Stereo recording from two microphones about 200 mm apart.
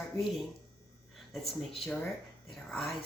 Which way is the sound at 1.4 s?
30° left (ahead or behind).